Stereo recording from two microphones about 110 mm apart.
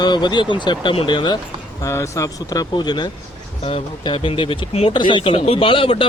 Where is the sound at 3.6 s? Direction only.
65° left (ahead or behind).